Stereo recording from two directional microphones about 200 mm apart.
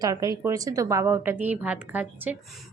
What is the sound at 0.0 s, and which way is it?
A woman's voice, 20° right (ahead or behind).